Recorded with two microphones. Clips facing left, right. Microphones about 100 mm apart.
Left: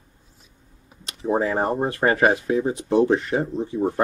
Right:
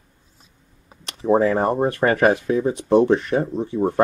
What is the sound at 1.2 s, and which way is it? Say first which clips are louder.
Speech: right 4 dB; 60° right (ahead or behind).